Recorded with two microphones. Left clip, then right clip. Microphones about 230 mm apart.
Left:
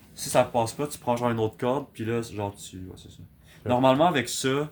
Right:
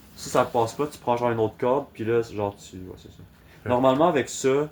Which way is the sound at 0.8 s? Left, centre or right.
Left.